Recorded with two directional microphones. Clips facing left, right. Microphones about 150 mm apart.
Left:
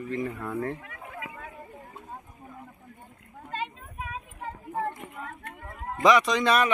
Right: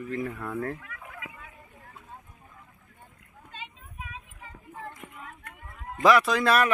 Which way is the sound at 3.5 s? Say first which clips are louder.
Left 10 dB; 50° left (ahead or behind).